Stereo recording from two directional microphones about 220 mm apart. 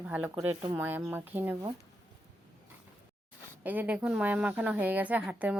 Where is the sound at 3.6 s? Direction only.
5° right (ahead or behind).